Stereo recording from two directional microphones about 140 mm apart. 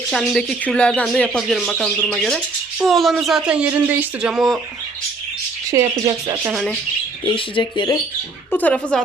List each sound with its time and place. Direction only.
0.1 s speech: 5° left (ahead or behind)
5.7 s speech: 25° right (ahead or behind)
7.3 s speech: 35° left (ahead or behind)
8.5 s speech: 10° left (ahead or behind)